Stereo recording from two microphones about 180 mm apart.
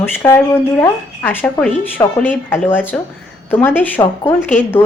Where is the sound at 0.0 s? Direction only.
15° left (ahead or behind).